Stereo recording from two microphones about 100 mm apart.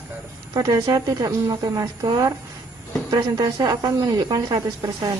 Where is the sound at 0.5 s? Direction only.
35° right (ahead or behind).